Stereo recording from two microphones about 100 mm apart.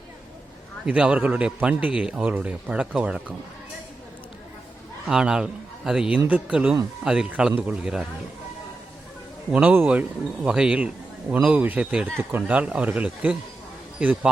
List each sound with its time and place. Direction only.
0.9 s a man's voice: 15° right (ahead or behind)
5.0 s a man's voice: 5° right (ahead or behind)
9.5 s a man's voice: 15° right (ahead or behind)